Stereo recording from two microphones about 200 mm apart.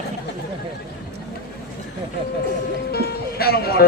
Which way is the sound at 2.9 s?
50° left (ahead or behind).